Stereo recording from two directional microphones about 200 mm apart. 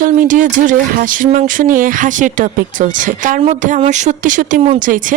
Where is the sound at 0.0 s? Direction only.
40° right (ahead or behind).